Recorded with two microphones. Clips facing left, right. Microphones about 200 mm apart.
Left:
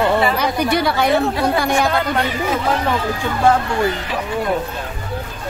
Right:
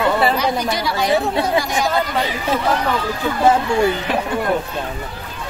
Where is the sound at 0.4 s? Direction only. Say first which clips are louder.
Left 2 dB; 60° left (ahead or behind).